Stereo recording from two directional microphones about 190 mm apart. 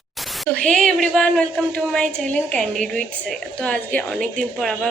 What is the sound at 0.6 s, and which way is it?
A woman's voice, 5° left (ahead or behind).